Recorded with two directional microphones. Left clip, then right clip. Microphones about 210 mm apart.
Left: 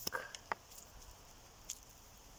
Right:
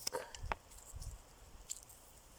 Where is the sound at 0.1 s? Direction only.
20° right (ahead or behind).